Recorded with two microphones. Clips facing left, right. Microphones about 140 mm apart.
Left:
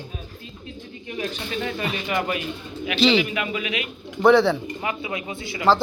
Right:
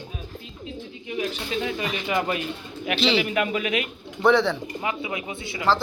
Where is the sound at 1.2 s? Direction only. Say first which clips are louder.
Right 1 dB; 10° right (ahead or behind).